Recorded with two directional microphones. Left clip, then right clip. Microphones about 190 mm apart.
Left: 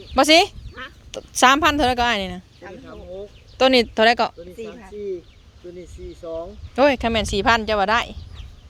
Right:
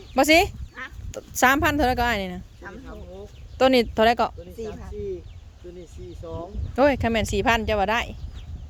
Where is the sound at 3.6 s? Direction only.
20° right (ahead or behind).